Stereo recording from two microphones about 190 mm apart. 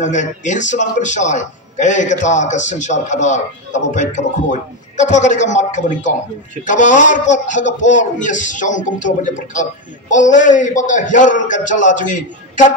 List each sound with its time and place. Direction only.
0.0 s a man's voice: 40° left (ahead or behind)